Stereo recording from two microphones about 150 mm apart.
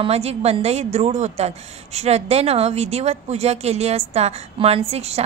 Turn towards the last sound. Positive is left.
turn(degrees=-45)  # may be behind; listen again after turning